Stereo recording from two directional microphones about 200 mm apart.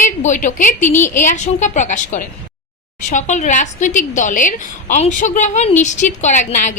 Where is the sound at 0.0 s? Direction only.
40° left (ahead or behind).